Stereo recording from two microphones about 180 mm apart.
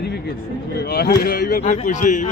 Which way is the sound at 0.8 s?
60° left (ahead or behind).